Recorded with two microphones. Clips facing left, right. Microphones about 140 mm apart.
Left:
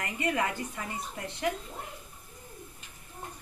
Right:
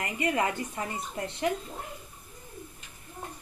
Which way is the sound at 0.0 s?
25° right (ahead or behind).